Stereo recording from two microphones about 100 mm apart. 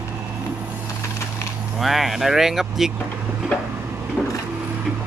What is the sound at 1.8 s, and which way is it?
Speech, centre (ahead or behind).